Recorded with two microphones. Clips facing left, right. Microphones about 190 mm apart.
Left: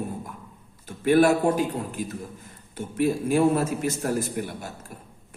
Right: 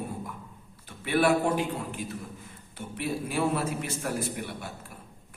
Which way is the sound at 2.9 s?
45° left (ahead or behind).